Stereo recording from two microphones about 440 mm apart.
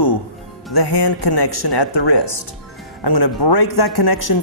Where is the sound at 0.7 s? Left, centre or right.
Left.